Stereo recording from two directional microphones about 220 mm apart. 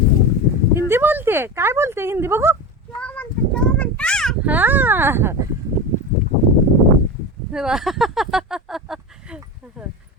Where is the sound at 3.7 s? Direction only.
5° left (ahead or behind); by 5.4 s 10° right (ahead or behind).